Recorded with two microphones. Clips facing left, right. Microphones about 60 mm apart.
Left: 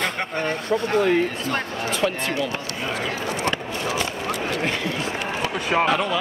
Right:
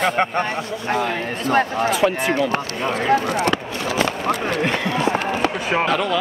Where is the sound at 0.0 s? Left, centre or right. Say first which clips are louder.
Right 6 dB; right.